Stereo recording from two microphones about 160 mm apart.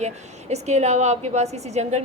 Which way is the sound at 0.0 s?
45° right (ahead or behind).